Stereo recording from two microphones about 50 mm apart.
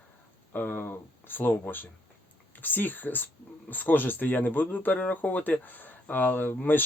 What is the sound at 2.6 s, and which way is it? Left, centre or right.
Speech, left.